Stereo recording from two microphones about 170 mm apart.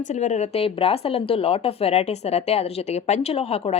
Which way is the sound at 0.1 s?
45° left (ahead or behind).